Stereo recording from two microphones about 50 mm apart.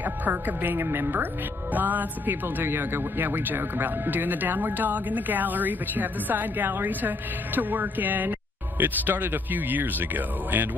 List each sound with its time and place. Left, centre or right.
0.0 s speech: right